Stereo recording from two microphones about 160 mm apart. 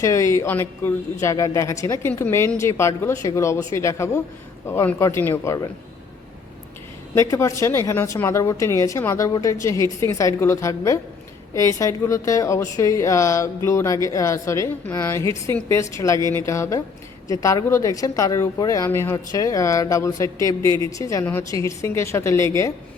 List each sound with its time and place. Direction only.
0.0 s a woman's voice: 20° left (ahead or behind)
7.2 s a woman's voice: 20° left (ahead or behind)